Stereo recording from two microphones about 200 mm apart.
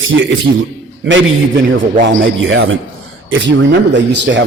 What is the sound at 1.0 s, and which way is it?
Speech, 65° right (ahead or behind).